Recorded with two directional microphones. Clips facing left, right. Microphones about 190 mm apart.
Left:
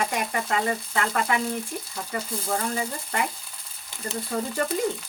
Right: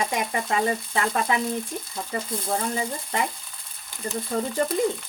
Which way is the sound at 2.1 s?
30° right (ahead or behind).